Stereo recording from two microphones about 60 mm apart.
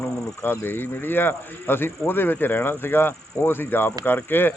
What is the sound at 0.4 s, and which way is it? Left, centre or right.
Speech, left.